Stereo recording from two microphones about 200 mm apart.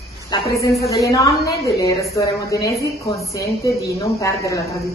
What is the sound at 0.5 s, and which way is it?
A woman's voice, 15° left (ahead or behind).